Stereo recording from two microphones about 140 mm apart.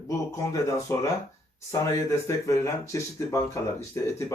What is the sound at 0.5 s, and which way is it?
Speech, 20° left (ahead or behind).